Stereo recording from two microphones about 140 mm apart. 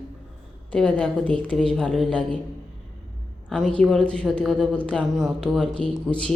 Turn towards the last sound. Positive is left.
turn(degrees=5)  # may be behind; listen again after turning